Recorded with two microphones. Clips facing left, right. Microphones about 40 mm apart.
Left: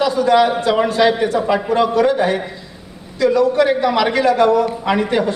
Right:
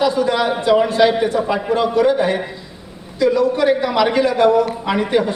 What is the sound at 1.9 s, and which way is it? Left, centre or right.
A man's voice, centre.